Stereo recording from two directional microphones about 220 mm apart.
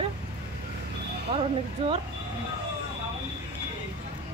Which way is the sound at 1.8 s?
25° right (ahead or behind).